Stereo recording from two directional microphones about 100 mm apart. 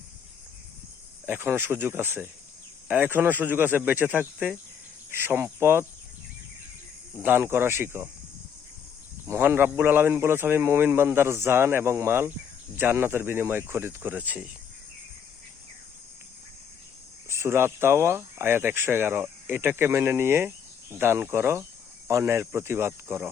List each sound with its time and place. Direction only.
1.3 s speech: 20° right (ahead or behind)
7.2 s speech: 20° right (ahead or behind)
9.2 s speech: 25° right (ahead or behind)
17.2 s speech: 25° right (ahead or behind)